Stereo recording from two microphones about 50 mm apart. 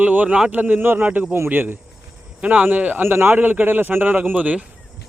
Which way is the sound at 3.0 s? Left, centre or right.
Right.